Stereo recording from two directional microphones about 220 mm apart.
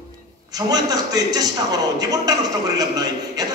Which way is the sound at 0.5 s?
15° right (ahead or behind).